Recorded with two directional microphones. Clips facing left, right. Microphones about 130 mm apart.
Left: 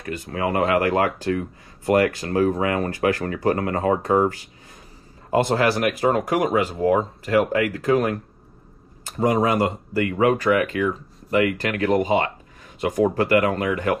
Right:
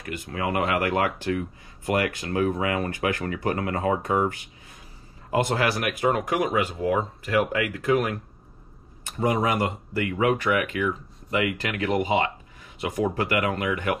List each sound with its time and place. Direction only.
0.3 s speech: 30° left (ahead or behind)
5.3 s speech: 30° left (ahead or behind)
9.2 s speech: 35° left (ahead or behind)